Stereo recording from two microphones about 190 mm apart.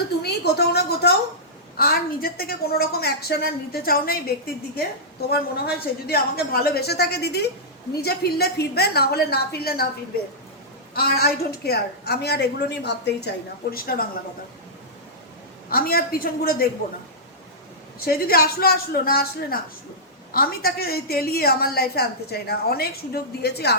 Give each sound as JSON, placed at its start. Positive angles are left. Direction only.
{"t": 0.2, "sound": "a woman's voice", "side_deg": 60}
{"t": 10.9, "sound": "a woman's voice", "side_deg": 55}
{"t": 15.7, "sound": "a woman's voice", "side_deg": 50}
{"t": 18.0, "sound": "a woman's voice", "side_deg": 50}